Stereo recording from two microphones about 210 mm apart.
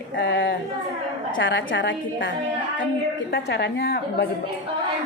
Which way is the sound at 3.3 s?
50° left (ahead or behind).